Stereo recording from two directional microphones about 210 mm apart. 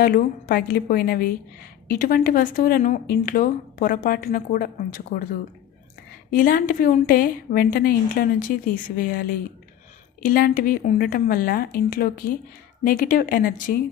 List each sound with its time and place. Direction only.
0.0 s a woman's voice: 45° left (ahead or behind)